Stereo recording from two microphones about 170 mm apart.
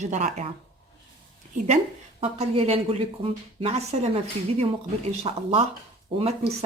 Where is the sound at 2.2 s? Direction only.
35° right (ahead or behind).